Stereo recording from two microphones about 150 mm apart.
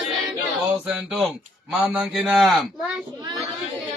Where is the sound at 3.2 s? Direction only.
35° right (ahead or behind).